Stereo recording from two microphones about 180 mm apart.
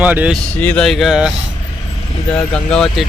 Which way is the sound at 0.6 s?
5° left (ahead or behind).